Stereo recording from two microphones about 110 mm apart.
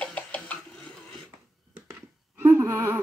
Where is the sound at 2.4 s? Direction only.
20° right (ahead or behind).